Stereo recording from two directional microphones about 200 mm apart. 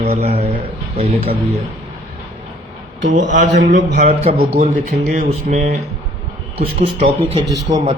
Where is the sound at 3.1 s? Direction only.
40° right (ahead or behind).